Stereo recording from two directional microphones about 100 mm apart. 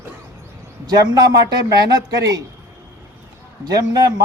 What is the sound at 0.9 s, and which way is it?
Speech, 45° right (ahead or behind).